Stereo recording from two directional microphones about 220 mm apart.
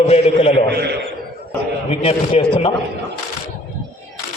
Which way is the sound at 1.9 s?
25° left (ahead or behind).